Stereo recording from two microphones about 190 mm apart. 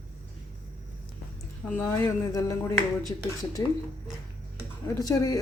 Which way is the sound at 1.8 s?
10° left (ahead or behind).